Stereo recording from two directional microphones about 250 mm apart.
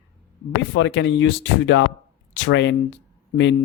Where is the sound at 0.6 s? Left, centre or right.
Left.